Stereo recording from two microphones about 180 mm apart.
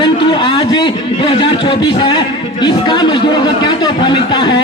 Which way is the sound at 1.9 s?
30° left (ahead or behind).